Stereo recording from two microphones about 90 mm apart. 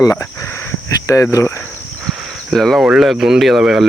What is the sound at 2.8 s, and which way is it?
Speech, 15° right (ahead or behind).